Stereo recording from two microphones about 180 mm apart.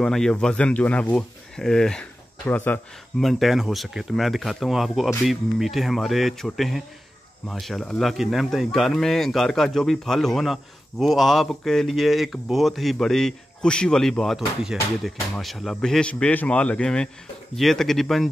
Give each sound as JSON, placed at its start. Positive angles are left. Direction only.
{"t": 0.0, "sound": "speech", "side_deg": 5}